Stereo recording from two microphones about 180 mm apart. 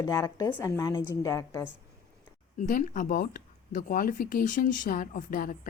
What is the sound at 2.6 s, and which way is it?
Speech, 45° left (ahead or behind).